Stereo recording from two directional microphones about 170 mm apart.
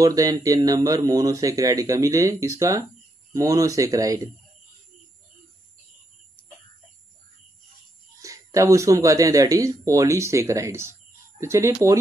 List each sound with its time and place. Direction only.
0.0 s speech: 20° right (ahead or behind)
8.2 s speech: 20° right (ahead or behind)